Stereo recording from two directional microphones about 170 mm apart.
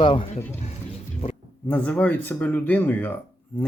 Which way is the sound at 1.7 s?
5° left (ahead or behind).